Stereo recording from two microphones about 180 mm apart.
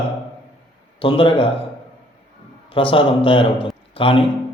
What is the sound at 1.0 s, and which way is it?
Speech, 30° left (ahead or behind).